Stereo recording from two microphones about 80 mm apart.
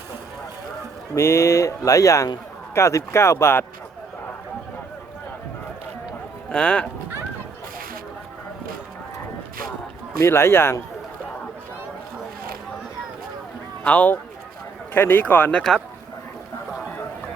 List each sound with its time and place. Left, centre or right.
1.1 s speech: left
6.5 s speech: centre
10.2 s speech: left
13.8 s speech: centre